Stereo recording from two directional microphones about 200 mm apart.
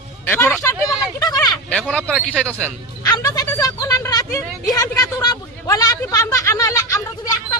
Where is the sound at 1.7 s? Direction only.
Centre (ahead or behind).